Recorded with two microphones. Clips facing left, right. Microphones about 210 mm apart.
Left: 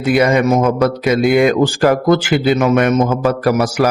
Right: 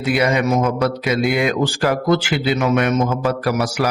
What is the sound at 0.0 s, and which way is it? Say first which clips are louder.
Mantra: left 5 dB; 45° left (ahead or behind).